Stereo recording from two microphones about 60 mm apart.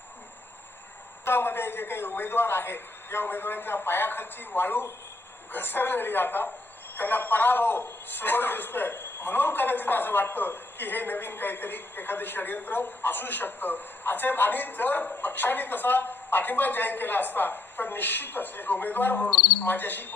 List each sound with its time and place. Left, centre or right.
1.2 s a man's voice: left